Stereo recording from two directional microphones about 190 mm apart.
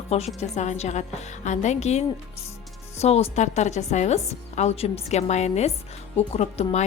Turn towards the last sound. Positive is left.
turn(degrees=35)  # may be behind; listen again after turning